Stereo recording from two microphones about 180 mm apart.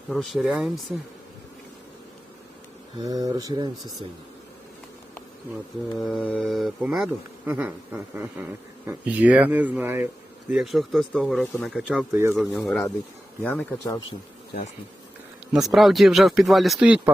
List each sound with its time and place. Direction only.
0.1 s speech: centre (ahead or behind)
3.0 s speech: 20° right (ahead or behind)
6.0 s speech: 5° left (ahead or behind)
10.5 s speech: centre (ahead or behind)
12.1 s speech: 15° right (ahead or behind)
12.6 s speech: centre (ahead or behind)
15.5 s speech: centre (ahead or behind)